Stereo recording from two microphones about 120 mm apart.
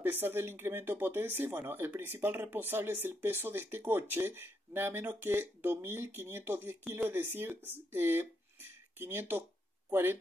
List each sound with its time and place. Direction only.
0.0 s speech: 15° right (ahead or behind)